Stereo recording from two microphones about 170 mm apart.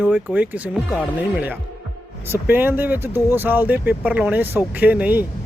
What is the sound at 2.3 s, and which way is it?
A man's voice, 10° right (ahead or behind).